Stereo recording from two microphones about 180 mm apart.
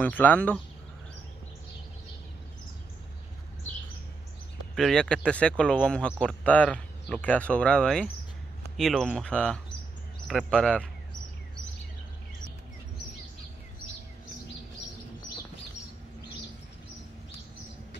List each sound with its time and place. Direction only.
0.0 s speech: 10° left (ahead or behind)
4.7 s speech: centre (ahead or behind)